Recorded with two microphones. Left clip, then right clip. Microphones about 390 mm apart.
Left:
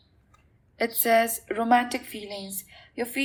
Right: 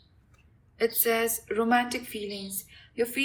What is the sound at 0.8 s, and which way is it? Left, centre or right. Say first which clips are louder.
A woman's voice: left 4 dB; centre.